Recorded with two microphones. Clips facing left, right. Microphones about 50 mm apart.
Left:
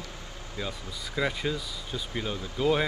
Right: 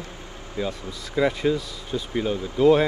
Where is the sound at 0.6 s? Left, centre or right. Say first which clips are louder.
Right 7 dB; right.